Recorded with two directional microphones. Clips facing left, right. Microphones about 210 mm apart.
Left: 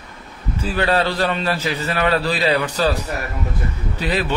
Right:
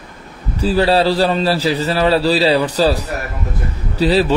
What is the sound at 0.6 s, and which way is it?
A man's voice, 35° right (ahead or behind).